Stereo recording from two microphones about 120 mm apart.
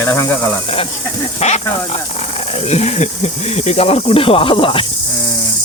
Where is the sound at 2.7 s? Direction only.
65° left (ahead or behind); by 4.8 s 45° left (ahead or behind).